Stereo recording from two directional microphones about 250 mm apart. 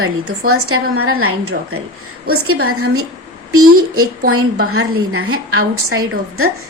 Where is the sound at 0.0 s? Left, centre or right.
Right.